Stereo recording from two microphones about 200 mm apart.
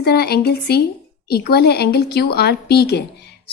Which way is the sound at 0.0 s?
55° left (ahead or behind).